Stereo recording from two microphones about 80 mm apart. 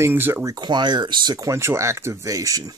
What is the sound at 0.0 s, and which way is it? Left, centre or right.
Speech, right.